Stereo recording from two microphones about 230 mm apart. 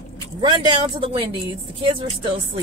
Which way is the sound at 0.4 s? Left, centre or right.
Centre.